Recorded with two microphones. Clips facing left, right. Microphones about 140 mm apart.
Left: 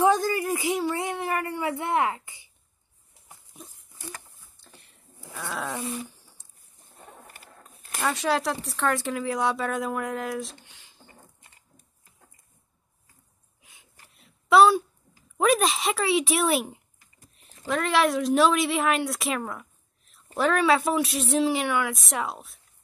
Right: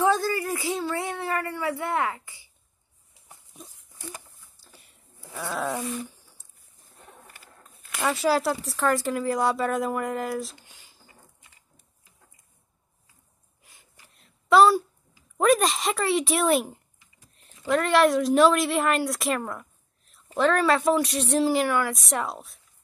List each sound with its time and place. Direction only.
0.0 s a woman's voice: 15° left (ahead or behind)
8.0 s speech: 5° right (ahead or behind)
13.6 s a sound: centre (ahead or behind)
15.3 s a woman's voice: centre (ahead or behind)